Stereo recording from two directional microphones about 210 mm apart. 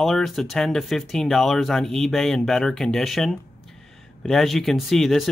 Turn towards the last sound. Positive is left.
turn(degrees=0)  # may be behind; listen again after turning